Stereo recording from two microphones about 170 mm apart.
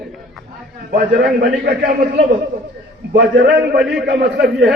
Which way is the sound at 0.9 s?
65° right (ahead or behind).